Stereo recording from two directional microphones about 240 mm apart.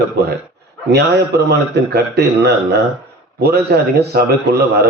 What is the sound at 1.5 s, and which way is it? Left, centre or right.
A man's voice, right.